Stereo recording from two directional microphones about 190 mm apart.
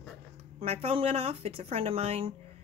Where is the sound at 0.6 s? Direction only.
30° right (ahead or behind).